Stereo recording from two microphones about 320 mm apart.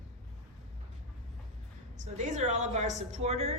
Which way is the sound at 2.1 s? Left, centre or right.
Right.